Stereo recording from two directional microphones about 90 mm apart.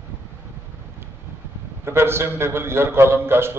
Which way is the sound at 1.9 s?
25° right (ahead or behind).